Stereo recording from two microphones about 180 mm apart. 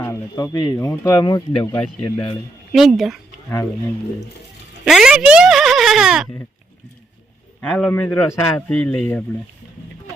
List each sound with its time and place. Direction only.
0.0 s speech: 15° left (ahead or behind)
2.7 s speech: centre (ahead or behind)
4.9 s speech: 5° right (ahead or behind)
7.6 s a man's voice: 5° left (ahead or behind)